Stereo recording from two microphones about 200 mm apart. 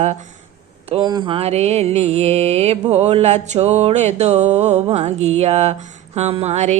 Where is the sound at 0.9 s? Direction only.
20° right (ahead or behind).